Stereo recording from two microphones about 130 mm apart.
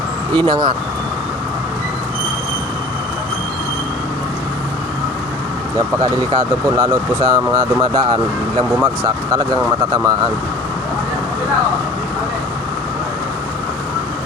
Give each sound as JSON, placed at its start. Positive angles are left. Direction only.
{"t": 0.3, "sound": "speech", "side_deg": -35}
{"t": 6.7, "sound": "speech", "side_deg": -25}